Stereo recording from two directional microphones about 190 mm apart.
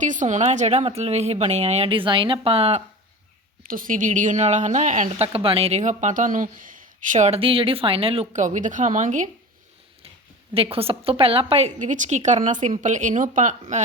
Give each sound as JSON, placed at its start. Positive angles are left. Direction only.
{"t": 0.0, "sound": "a woman's voice", "side_deg": -40}
{"t": 3.7, "sound": "a woman's voice", "side_deg": -45}
{"t": 10.5, "sound": "a woman's voice", "side_deg": -30}